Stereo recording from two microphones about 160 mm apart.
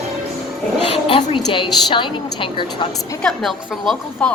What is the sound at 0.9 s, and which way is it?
A woman's voice, 35° left (ahead or behind).